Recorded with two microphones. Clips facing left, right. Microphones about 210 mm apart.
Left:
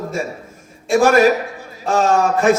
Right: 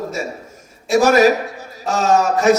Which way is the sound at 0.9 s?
40° right (ahead or behind).